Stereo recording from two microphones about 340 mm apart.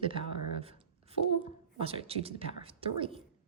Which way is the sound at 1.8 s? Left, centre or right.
Centre.